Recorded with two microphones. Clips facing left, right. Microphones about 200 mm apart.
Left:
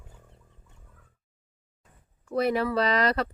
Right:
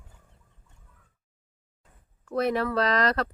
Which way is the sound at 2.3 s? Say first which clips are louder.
Left 1 dB; centre (ahead or behind).